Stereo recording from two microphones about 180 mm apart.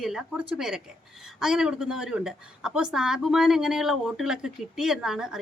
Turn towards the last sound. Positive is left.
turn(degrees=-5)  # may be behind; listen again after turning